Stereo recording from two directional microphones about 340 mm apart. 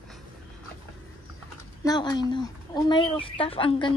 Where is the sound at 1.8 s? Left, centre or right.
Centre.